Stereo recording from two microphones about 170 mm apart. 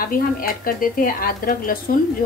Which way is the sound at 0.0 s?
55° left (ahead or behind).